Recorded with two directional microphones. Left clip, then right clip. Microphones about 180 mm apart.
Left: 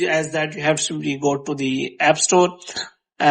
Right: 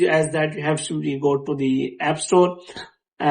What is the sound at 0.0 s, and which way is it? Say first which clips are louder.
Speech: right 2 dB; 20° left (ahead or behind).